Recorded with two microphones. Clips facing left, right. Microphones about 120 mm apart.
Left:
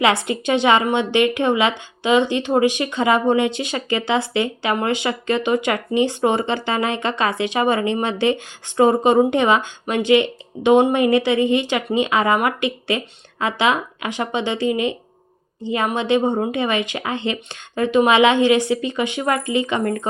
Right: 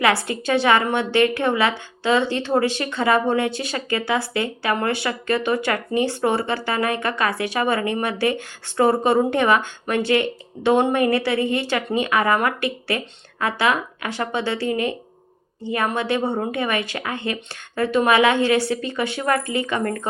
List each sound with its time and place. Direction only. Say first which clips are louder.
0.0 s a woman's voice: left 2 dB; 20° left (ahead or behind)